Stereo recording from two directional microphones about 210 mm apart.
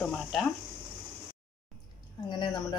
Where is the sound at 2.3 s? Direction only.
20° left (ahead or behind).